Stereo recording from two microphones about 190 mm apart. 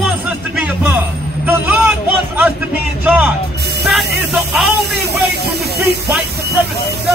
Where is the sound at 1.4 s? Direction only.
10° right (ahead or behind).